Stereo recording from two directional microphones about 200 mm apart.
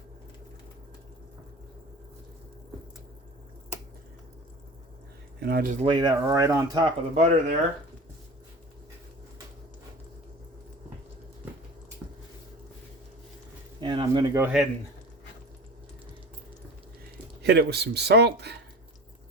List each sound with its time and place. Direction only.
5.4 s speech: 50° right (ahead or behind)
5.8 s speech: 25° right (ahead or behind)
6.8 s speech: 35° right (ahead or behind)
13.8 s a sound: 20° right (ahead or behind)
17.4 s speech: 55° right (ahead or behind)